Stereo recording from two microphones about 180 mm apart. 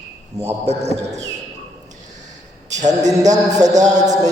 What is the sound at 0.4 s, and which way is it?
Speech, 35° right (ahead or behind).